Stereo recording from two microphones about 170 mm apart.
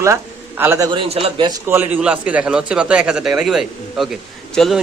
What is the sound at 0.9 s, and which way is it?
Speech, 35° right (ahead or behind).